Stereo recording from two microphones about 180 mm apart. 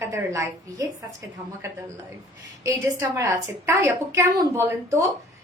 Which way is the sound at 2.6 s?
20° right (ahead or behind).